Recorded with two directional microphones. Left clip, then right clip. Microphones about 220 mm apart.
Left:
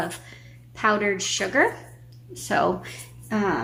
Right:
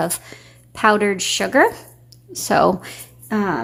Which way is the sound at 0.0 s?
50° right (ahead or behind).